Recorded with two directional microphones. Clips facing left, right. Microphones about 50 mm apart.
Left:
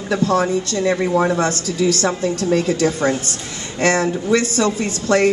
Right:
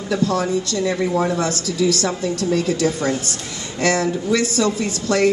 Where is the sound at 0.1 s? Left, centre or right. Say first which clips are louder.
Left 2 dB; left.